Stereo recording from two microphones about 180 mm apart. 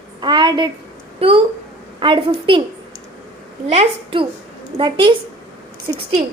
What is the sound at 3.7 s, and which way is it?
A woman's voice, 30° right (ahead or behind).